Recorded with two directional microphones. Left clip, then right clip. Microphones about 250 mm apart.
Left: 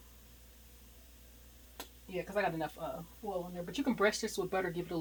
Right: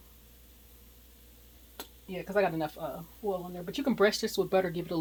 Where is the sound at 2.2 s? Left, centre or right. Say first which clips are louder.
Right 6 dB; right.